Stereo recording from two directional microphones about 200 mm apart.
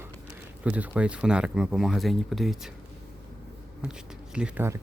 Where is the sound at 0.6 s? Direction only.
5° right (ahead or behind).